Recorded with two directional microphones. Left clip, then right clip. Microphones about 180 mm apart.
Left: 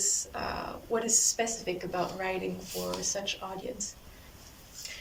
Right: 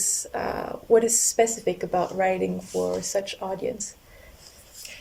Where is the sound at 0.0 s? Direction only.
45° right (ahead or behind).